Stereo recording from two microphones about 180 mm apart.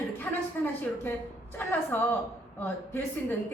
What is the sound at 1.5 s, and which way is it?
A woman's voice, 10° left (ahead or behind).